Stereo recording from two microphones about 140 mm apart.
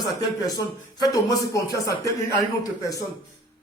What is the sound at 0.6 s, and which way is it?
Speech, 25° left (ahead or behind).